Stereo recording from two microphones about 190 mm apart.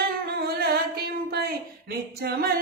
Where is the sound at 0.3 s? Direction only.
55° right (ahead or behind).